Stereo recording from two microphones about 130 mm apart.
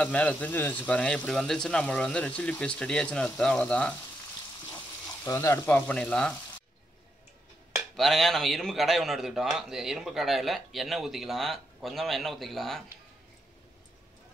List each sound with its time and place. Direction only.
0.0 s speech: 10° left (ahead or behind)
5.2 s speech: 20° left (ahead or behind)
7.7 s speech: centre (ahead or behind)